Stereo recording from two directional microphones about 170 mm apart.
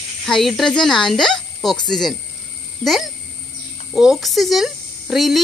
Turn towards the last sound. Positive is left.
turn(degrees=0)  # may be behind; listen again after turning